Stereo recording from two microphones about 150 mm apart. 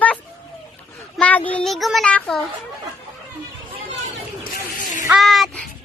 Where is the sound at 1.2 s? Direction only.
10° left (ahead or behind).